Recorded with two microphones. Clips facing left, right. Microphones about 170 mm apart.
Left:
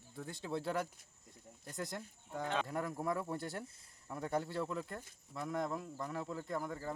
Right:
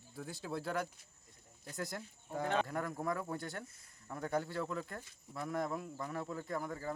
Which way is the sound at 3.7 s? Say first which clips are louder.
Even; 30° left (ahead or behind).